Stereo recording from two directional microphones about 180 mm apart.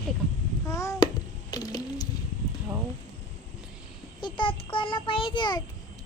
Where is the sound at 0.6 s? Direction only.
15° left (ahead or behind).